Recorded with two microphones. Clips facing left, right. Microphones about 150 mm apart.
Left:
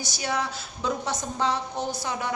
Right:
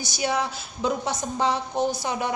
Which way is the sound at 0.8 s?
15° right (ahead or behind).